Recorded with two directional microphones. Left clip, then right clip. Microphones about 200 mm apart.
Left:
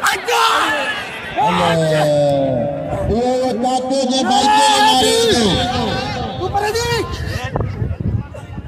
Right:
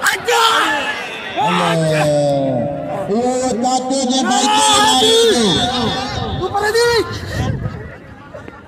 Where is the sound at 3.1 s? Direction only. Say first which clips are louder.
Even; 15° right (ahead or behind).